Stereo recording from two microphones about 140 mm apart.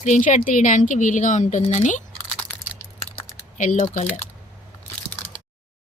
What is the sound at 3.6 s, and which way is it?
Speech, 60° left (ahead or behind).